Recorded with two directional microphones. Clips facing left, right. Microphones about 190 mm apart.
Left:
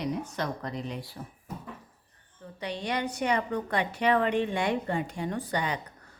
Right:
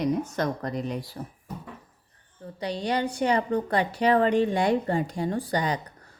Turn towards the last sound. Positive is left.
turn(degrees=-35)  # may be behind; listen again after turning